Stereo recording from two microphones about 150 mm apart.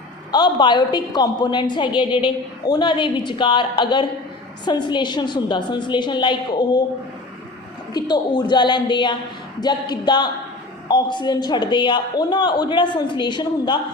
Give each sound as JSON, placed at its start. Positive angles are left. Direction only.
{"t": 0.3, "sound": "a woman's voice", "side_deg": 30}
{"t": 7.9, "sound": "a woman's voice", "side_deg": 30}